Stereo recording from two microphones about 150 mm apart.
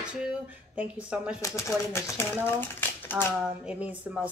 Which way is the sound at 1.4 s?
20° left (ahead or behind).